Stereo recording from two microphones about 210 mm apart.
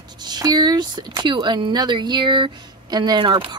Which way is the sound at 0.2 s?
20° right (ahead or behind).